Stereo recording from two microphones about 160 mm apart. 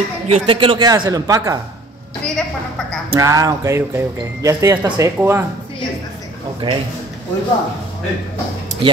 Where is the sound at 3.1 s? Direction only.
20° right (ahead or behind).